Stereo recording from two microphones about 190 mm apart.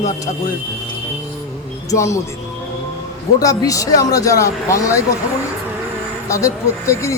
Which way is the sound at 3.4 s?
20° left (ahead or behind).